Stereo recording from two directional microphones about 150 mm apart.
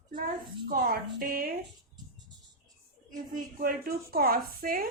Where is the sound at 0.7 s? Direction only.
75° right (ahead or behind).